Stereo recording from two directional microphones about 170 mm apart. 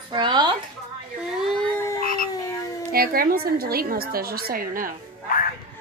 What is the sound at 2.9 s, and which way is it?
A woman's voice, 60° right (ahead or behind).